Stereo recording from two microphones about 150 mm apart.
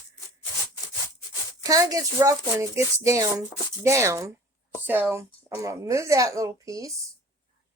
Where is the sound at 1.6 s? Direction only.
25° right (ahead or behind).